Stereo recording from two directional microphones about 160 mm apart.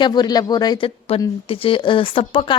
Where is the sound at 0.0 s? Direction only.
25° left (ahead or behind).